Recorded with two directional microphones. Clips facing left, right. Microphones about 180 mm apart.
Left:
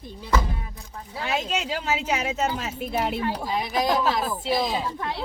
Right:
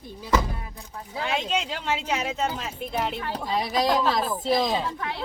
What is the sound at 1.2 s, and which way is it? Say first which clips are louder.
Speech: even; 5° left (ahead or behind).